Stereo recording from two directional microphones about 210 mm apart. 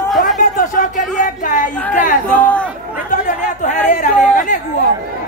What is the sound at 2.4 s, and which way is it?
Speech, 5° left (ahead or behind).